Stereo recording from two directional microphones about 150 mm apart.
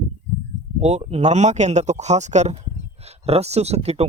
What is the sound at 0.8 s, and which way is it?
Speech, 45° right (ahead or behind).